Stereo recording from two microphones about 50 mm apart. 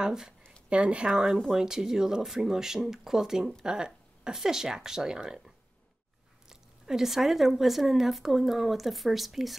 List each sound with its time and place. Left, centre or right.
0.0 s a sound: centre
0.7 s speech: right
6.5 s speech: centre